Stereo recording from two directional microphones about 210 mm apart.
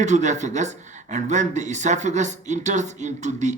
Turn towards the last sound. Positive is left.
turn(degrees=-35)  # may be behind; listen again after turning